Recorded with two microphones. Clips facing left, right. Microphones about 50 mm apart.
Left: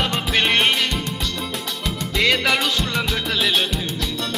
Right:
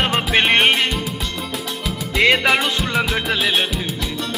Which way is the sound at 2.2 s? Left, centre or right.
Right.